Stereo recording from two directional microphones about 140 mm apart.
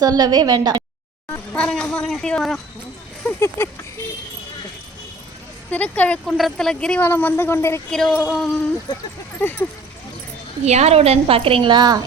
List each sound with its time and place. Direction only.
0.0 s a woman's voice: 25° right (ahead or behind)
1.5 s speech: 5° left (ahead or behind)
3.2 s speech: 15° left (ahead or behind)
5.7 s speech: 10° left (ahead or behind)
7.9 s speech: 5° left (ahead or behind)
9.4 s speech: 15° left (ahead or behind)
10.7 s a woman's voice: 50° right (ahead or behind); by 12.0 s 30° right (ahead or behind)